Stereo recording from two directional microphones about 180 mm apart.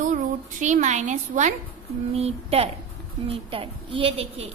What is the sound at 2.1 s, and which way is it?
A woman's voice, 35° right (ahead or behind).